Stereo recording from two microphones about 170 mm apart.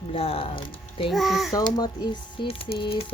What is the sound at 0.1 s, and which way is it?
Speech, 35° left (ahead or behind).